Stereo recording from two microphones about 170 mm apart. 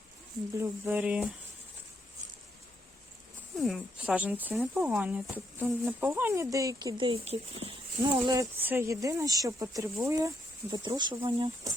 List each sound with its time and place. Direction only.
0.6 s speech: 10° right (ahead or behind)
3.6 s speech: 5° right (ahead or behind); by 8.4 s 25° right (ahead or behind)
8.6 s speech: 15° right (ahead or behind); by 11.5 s 30° right (ahead or behind)